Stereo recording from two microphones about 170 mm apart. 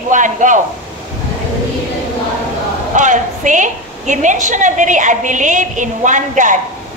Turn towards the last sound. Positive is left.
turn(degrees=-50)  # may be behind; listen again after turning